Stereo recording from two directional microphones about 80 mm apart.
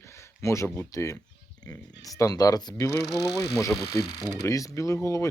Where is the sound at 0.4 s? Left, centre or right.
Left.